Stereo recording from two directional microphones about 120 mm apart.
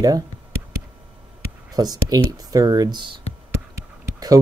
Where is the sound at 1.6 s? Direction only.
30° right (ahead or behind).